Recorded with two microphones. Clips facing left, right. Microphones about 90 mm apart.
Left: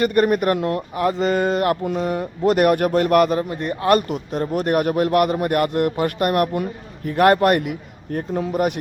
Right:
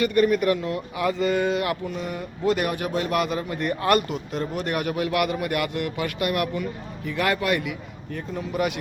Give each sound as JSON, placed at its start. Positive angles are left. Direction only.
{"t": 0.0, "sound": "a man's voice", "side_deg": 55}
{"t": 1.8, "sound": "a man's voice", "side_deg": 55}
{"t": 3.5, "sound": "a man's voice", "side_deg": 25}